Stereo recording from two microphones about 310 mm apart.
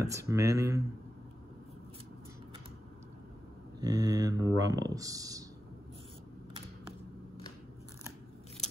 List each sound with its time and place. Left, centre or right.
0.0 s speech: centre
3.8 s speech: centre